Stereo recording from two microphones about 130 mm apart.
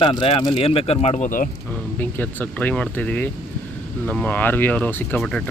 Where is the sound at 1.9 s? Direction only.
15° left (ahead or behind).